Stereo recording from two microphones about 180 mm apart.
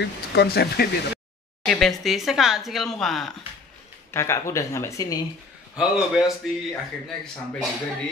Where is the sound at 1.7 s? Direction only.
Centre (ahead or behind).